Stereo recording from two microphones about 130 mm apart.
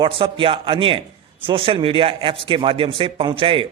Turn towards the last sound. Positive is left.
turn(degrees=-45)  # may be behind; listen again after turning